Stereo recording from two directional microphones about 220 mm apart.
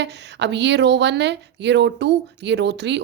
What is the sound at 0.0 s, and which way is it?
Speech, 50° right (ahead or behind).